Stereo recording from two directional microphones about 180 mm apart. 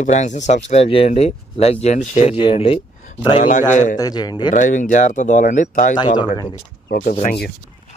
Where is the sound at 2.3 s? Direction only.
30° left (ahead or behind).